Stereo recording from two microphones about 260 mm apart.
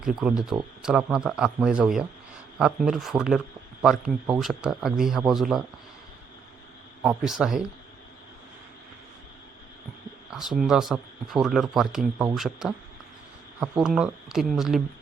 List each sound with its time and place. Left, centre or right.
0.0 s speech: centre
7.0 s speech: centre
10.6 s speech: centre